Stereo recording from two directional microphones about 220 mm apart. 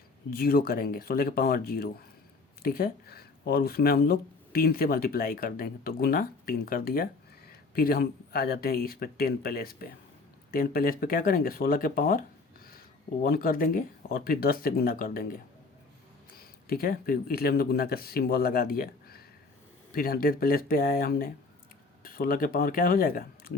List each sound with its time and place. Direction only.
0.3 s speech: 45° left (ahead or behind)
13.2 s speech: 40° left (ahead or behind)